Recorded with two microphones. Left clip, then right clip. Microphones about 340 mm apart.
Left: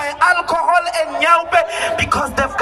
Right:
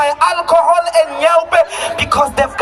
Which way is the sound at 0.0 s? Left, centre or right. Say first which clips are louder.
Right 2 dB; centre.